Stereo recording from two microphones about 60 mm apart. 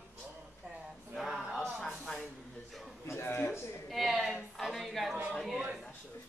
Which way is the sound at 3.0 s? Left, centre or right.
Left.